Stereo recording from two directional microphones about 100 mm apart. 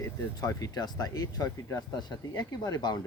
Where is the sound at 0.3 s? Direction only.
40° left (ahead or behind).